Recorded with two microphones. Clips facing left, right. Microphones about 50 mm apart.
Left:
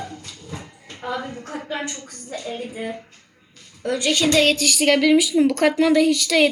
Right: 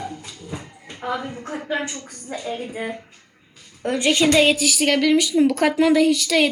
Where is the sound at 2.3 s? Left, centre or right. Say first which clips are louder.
Right 2 dB; centre.